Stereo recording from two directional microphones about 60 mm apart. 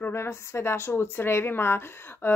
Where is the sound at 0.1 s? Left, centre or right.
Left.